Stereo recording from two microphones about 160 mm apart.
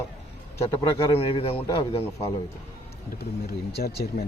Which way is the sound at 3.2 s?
85° left.